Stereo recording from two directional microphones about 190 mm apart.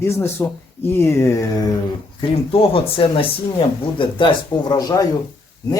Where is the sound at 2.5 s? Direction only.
30° left (ahead or behind).